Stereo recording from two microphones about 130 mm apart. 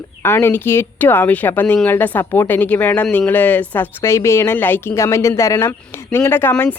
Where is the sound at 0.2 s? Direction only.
20° left (ahead or behind).